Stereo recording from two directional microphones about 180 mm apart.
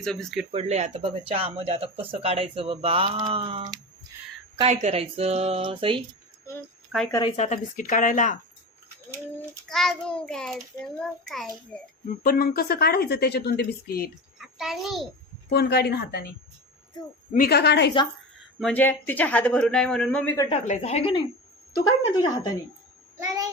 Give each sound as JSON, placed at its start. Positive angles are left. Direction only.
{"t": 0.0, "sound": "a man's voice", "side_deg": 5}
{"t": 0.5, "sound": "speech", "side_deg": -35}
{"t": 4.6, "sound": "speech", "side_deg": -35}
{"t": 7.1, "sound": "a woman's voice", "side_deg": 25}
{"t": 7.3, "sound": "speech", "side_deg": 40}
{"t": 9.6, "sound": "a man's voice", "side_deg": 0}
{"t": 12.0, "sound": "a woman's voice", "side_deg": 55}
{"t": 14.3, "sound": "a child's voice", "side_deg": 0}
{"t": 15.4, "sound": "a woman's voice", "side_deg": 65}
{"t": 17.3, "sound": "a woman's voice", "side_deg": 60}
{"t": 18.6, "sound": "a man's voice", "side_deg": 10}
{"t": 20.5, "sound": "a woman's voice", "side_deg": 35}
{"t": 21.8, "sound": "a woman's voice", "side_deg": 20}